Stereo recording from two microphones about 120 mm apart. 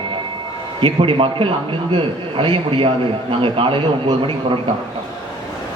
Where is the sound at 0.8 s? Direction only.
45° right (ahead or behind).